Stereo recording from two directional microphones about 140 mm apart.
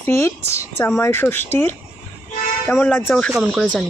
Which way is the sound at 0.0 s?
20° left (ahead or behind).